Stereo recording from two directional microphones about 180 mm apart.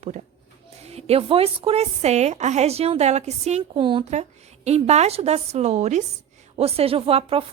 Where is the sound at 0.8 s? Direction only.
35° right (ahead or behind).